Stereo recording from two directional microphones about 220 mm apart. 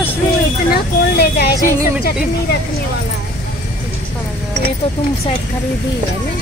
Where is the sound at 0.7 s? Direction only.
45° left (ahead or behind).